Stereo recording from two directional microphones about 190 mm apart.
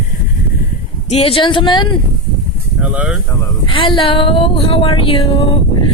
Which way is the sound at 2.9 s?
10° right (ahead or behind).